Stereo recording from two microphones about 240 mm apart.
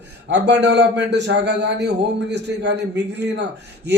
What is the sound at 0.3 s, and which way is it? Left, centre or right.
A man's voice, right.